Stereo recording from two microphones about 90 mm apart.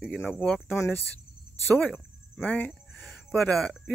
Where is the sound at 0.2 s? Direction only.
20° left (ahead or behind).